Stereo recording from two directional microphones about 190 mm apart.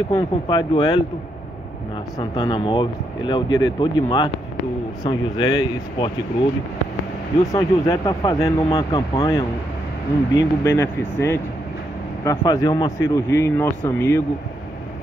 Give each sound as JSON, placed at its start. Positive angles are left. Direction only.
{"t": 0.1, "sound": "speech", "side_deg": 25}
{"t": 2.1, "sound": "speech", "side_deg": 20}
{"t": 7.5, "sound": "speech", "side_deg": 15}